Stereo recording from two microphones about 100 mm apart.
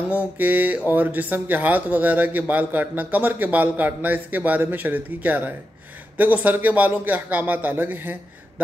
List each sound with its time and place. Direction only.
0.1 s speech: 15° right (ahead or behind)